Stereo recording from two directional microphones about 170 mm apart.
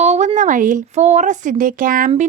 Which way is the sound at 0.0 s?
40° right (ahead or behind).